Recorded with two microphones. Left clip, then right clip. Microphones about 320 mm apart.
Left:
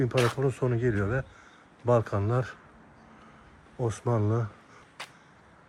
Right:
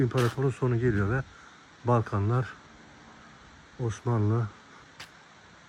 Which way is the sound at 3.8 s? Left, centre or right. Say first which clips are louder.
Left 2 dB; centre.